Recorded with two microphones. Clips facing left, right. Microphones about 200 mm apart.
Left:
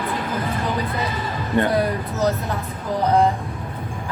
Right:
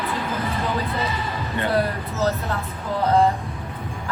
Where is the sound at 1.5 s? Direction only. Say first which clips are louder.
Left 7 dB; 50° left (ahead or behind).